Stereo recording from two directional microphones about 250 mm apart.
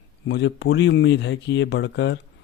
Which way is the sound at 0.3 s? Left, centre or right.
Left.